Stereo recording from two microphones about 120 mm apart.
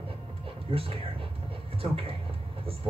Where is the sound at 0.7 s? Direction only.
50° right (ahead or behind).